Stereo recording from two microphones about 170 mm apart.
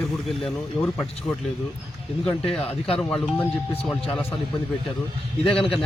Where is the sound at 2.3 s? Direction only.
5° left (ahead or behind).